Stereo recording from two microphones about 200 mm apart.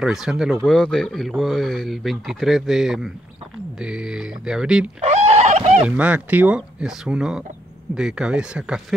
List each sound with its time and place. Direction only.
0.0 s speech: centre (ahead or behind)
5.0 s a sound: 35° right (ahead or behind)
5.9 s speech: 5° right (ahead or behind)